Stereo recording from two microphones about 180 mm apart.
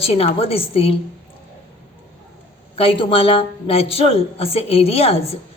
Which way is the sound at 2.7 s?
30° left (ahead or behind).